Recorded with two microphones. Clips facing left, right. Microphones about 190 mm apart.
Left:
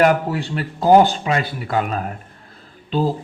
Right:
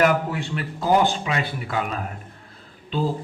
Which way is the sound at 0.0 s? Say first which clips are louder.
Left 4 dB; 35° left (ahead or behind).